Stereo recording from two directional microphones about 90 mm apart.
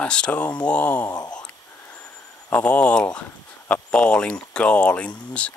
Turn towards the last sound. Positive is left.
turn(degrees=15)  # may be behind; listen again after turning